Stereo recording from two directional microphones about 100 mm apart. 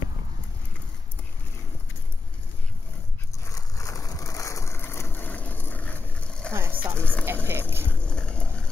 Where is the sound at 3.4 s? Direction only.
30° left (ahead or behind); by 6.5 s 10° left (ahead or behind).